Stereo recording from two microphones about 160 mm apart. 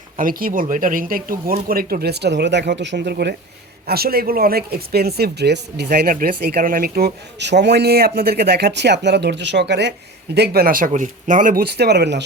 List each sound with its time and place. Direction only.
0.2 s speech: 60° right (ahead or behind); by 3.3 s 90° right
3.8 s speech: 75° right (ahead or behind); by 12.2 s 90° right